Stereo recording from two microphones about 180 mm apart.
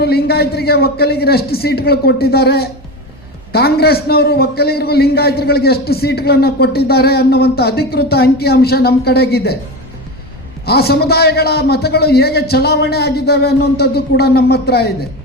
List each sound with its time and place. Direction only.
0.0 s a man's voice: 60° left (ahead or behind)
10.7 s a man's voice: 60° left (ahead or behind)